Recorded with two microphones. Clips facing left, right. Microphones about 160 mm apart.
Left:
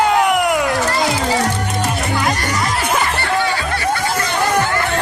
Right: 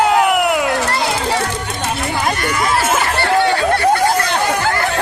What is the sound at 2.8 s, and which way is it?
Music, 5° right (ahead or behind).